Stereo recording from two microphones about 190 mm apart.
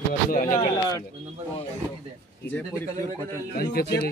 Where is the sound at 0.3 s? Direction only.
45° left (ahead or behind).